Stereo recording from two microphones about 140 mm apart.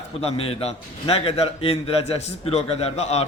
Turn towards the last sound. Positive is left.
turn(degrees=50)  # may be behind; listen again after turning